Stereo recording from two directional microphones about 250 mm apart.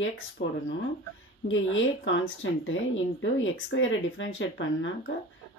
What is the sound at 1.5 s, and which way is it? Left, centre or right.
Speech, left.